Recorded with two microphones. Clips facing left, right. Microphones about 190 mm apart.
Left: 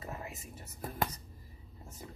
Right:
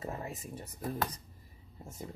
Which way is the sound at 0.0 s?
30° right (ahead or behind).